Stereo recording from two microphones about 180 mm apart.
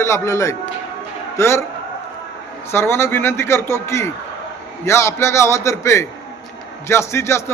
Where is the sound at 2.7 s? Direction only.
15° left (ahead or behind).